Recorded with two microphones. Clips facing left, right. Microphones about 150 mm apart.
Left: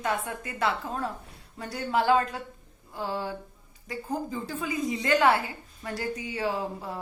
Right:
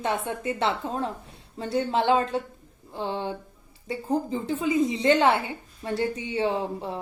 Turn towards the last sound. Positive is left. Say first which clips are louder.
# right 3 dB
turn(degrees=-25)  # may be behind; listen again after turning